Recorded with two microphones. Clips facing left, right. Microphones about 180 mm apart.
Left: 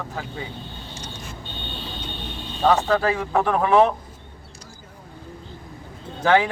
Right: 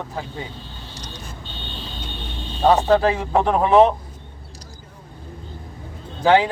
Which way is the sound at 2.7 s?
20° right (ahead or behind).